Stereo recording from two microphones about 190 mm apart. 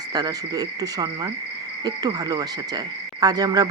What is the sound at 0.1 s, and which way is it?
Speech, 20° right (ahead or behind).